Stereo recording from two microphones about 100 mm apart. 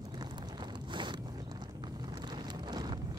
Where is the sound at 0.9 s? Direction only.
50° right (ahead or behind).